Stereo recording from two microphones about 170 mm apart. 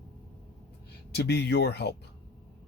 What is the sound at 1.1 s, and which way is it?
Speech, 75° left (ahead or behind).